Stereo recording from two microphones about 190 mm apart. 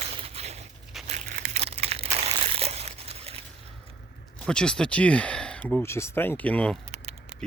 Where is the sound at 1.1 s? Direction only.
45° right (ahead or behind).